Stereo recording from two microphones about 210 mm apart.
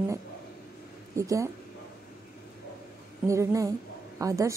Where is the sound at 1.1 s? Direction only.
15° right (ahead or behind).